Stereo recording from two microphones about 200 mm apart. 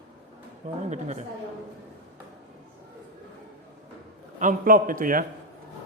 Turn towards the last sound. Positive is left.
turn(degrees=-45)  # may be behind; listen again after turning